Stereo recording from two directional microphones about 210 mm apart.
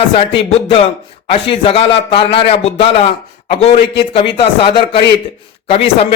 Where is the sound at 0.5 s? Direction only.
30° left (ahead or behind).